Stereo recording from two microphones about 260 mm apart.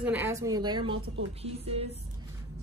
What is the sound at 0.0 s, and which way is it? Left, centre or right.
Speech, centre.